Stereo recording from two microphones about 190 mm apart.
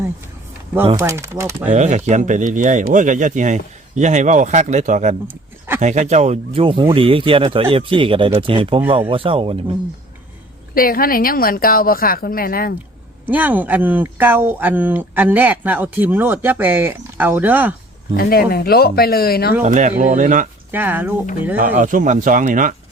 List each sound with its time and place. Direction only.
0.9 s speech: 15° right (ahead or behind)
1.7 s speech: 40° right (ahead or behind)
5.3 s a sound: 10° right (ahead or behind)
5.8 s speech: 40° right (ahead or behind)
10.8 s a woman's voice: 50° left (ahead or behind)
13.2 s speech: 10° right (ahead or behind)
18.2 s a woman's voice: 55° left (ahead or behind)
19.6 s speech: 40° right (ahead or behind)
20.7 s speech: 10° right (ahead or behind)
21.8 s speech: 45° right (ahead or behind)